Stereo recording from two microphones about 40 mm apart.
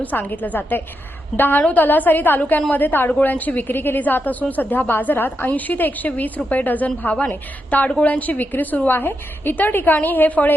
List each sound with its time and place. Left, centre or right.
0.0 s a woman's voice: left
1.7 s speech: left
2.6 s a woman's voice: left
2.8 s a woman's voice: left
3.2 s speech: left
4.6 s a woman's voice: left
5.5 s a woman's voice: left
8.9 s a woman's voice: left
9.6 s speech: left